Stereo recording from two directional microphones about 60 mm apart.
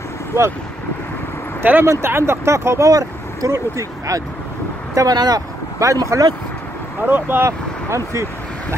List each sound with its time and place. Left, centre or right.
1.6 s speech: right
1.9 s speech: right
2.9 s speech: right
3.5 s speech: right
4.9 s speech: right
7.0 s speech: right
7.4 s speech: right